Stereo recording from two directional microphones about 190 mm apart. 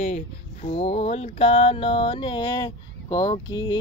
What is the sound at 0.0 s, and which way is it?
Speech, 35° left (ahead or behind).